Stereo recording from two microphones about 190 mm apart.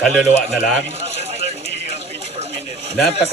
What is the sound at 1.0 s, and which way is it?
Bird, 35° right (ahead or behind).